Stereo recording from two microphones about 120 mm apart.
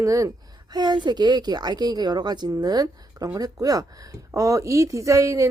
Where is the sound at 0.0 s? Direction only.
25° right (ahead or behind).